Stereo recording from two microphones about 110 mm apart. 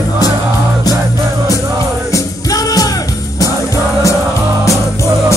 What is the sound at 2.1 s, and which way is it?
Music, 35° left (ahead or behind).